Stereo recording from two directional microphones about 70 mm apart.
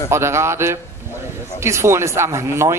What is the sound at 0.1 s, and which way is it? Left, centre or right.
Speech, right.